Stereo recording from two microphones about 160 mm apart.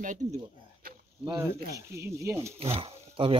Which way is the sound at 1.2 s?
20° right (ahead or behind).